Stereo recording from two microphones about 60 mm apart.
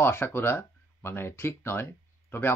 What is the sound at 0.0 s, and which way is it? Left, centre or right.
Speech, left.